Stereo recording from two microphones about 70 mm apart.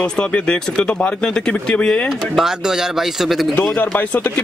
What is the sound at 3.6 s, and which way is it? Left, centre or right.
Speech, centre.